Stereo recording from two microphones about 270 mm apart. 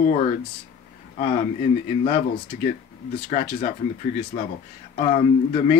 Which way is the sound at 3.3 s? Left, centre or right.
Left.